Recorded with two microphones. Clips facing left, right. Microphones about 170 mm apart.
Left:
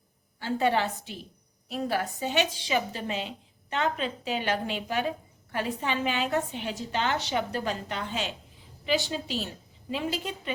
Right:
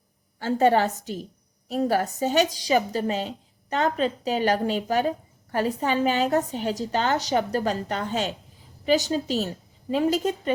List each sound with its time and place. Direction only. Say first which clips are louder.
0.3 s a woman's voice: right 6 dB; 45° right (ahead or behind)